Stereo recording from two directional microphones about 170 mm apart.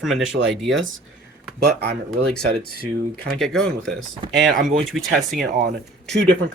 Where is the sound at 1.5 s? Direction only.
75° right (ahead or behind).